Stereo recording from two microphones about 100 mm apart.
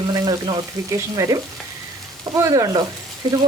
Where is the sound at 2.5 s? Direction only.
40° right (ahead or behind).